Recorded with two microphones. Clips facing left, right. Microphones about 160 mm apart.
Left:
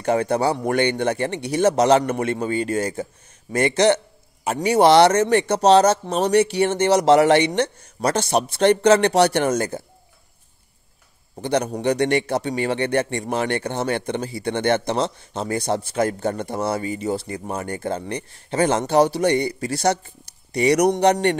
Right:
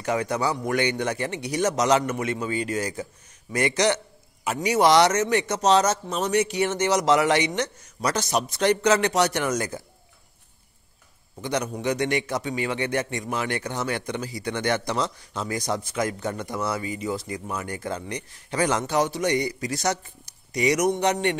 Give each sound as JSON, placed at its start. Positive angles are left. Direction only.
{"t": 0.0, "sound": "a man's voice", "side_deg": 30}
{"t": 11.3, "sound": "a man's voice", "side_deg": 30}